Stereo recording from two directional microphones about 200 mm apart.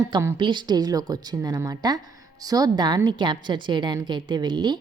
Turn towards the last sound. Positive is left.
turn(degrees=-20)  # may be behind; listen again after turning